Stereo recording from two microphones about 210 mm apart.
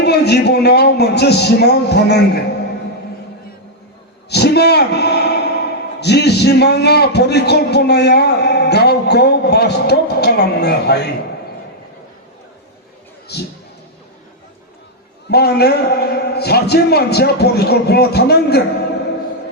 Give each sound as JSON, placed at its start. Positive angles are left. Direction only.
{"t": 0.0, "sound": "a man's voice", "side_deg": 50}
{"t": 4.3, "sound": "a man's voice", "side_deg": 50}
{"t": 13.3, "sound": "a man's voice", "side_deg": 50}
{"t": 15.3, "sound": "a man's voice", "side_deg": 50}